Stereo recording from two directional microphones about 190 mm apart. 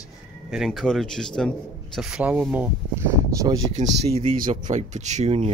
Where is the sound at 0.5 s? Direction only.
Centre (ahead or behind); by 3.6 s 15° right (ahead or behind).